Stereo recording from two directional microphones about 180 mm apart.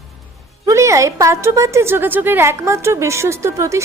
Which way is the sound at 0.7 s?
15° right (ahead or behind).